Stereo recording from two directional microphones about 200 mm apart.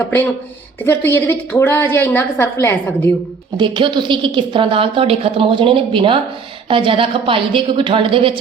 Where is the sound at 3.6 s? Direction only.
25° right (ahead or behind).